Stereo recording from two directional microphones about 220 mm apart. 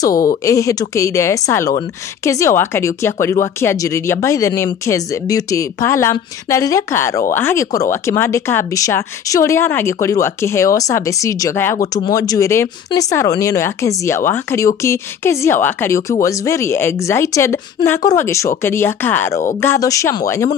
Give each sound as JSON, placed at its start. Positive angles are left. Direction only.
{"t": 0.1, "sound": "speech", "side_deg": 40}
{"t": 0.5, "sound": "speech", "side_deg": 15}